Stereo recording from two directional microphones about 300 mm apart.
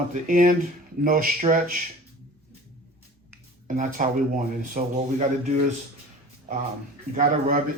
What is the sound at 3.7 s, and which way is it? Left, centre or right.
Speech, right.